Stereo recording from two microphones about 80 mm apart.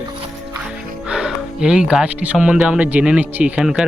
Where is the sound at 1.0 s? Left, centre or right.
Centre.